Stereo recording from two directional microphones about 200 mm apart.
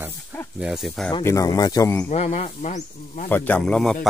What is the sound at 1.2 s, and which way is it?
Speech, 15° left (ahead or behind).